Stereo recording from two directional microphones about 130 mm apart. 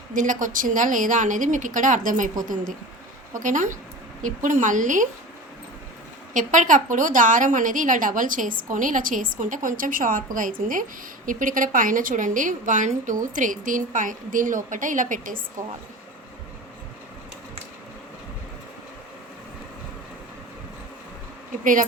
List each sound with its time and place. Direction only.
0.1 s a woman's voice: 90° right
3.3 s a woman's voice: 80° right
6.3 s a woman's voice: 80° right
21.6 s a woman's voice: 90° right